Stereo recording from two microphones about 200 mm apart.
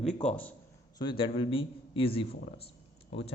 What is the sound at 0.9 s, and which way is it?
A man's voice, 25° left (ahead or behind).